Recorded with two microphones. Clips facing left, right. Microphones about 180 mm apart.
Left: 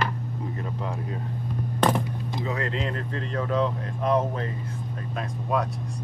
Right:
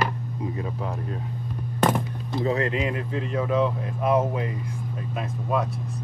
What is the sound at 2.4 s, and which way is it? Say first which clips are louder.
Speech: right 6 dB; 25° right (ahead or behind).